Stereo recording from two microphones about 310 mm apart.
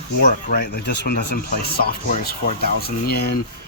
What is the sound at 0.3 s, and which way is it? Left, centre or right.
Speech, left.